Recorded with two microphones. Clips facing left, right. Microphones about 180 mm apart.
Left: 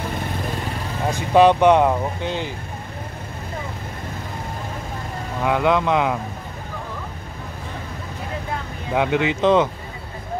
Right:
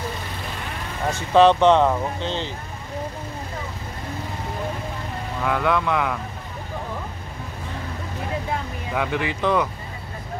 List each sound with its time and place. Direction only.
1.1 s speech: 10° left (ahead or behind)
5.4 s speech: 20° left (ahead or behind)
8.9 s speech: 20° left (ahead or behind)